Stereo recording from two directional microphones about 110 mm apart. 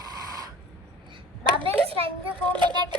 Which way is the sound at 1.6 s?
55° right (ahead or behind).